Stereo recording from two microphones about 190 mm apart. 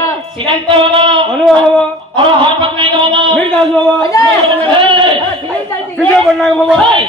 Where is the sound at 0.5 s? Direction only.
25° right (ahead or behind).